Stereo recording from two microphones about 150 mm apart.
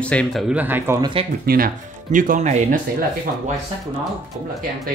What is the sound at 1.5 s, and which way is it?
Speech, 80° right.